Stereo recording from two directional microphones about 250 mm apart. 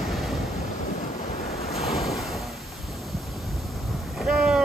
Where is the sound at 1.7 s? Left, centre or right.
Centre.